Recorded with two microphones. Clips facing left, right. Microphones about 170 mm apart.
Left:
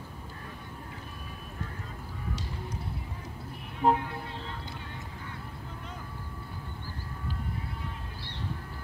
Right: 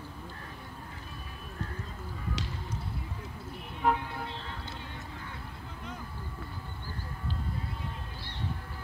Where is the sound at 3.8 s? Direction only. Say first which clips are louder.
Left 3 dB; 35° left (ahead or behind).